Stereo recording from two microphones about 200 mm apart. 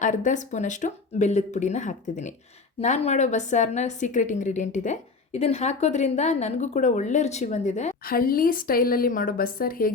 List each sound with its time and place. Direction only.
0.0 s a woman's voice: 40° left (ahead or behind)